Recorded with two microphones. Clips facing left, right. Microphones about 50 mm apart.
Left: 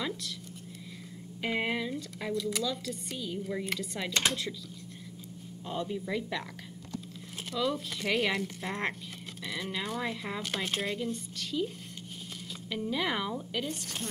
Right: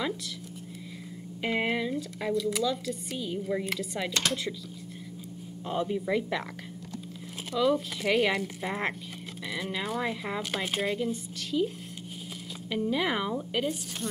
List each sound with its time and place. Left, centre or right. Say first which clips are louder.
1.4 s speech: right 3 dB; centre
5.7 s a woman's voice: right 5 dB; centre
7.5 s a woman's voice: right 6 dB; centre